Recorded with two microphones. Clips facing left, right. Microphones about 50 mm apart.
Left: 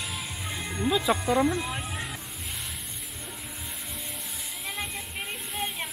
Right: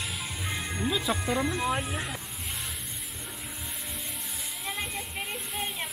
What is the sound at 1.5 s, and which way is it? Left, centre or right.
Speech, centre.